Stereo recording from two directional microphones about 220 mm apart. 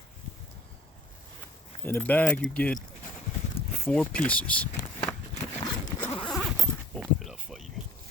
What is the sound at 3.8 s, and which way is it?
Speech, 5° left (ahead or behind).